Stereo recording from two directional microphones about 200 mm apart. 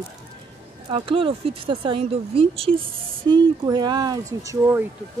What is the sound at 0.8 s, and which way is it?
Speech, 25° right (ahead or behind).